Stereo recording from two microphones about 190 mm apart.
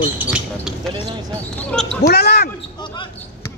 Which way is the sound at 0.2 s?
5° right (ahead or behind).